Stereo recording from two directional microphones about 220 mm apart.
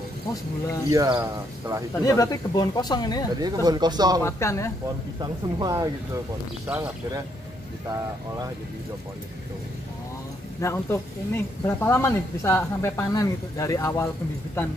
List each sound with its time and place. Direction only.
0.8 s speech: 15° right (ahead or behind)
2.0 s speech: 15° left (ahead or behind)
3.3 s speech: 20° right (ahead or behind)
4.2 s speech: 10° left (ahead or behind)
5.2 s speech: 15° right (ahead or behind)
10.6 s speech: 10° left (ahead or behind)